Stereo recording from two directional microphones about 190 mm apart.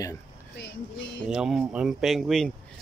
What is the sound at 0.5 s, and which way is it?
Speech, 60° left (ahead or behind).